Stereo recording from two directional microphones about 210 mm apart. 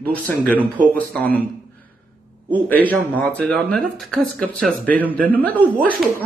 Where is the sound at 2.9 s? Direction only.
5° left (ahead or behind).